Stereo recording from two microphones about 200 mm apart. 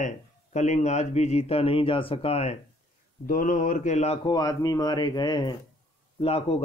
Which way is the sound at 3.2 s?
45° left (ahead or behind).